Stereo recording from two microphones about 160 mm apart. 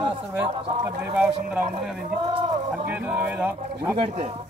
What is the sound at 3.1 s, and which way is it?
Speech, 10° right (ahead or behind).